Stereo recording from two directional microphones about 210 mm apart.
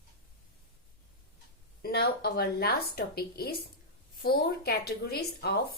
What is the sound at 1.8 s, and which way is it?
Speech, 50° left (ahead or behind).